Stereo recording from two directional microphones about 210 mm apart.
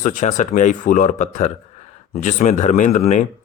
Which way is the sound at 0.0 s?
40° left (ahead or behind).